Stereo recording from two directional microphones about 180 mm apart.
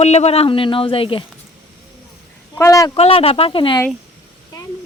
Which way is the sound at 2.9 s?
30° left (ahead or behind).